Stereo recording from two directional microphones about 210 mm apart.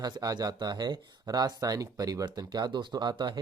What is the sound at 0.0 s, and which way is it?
Speech, 15° right (ahead or behind).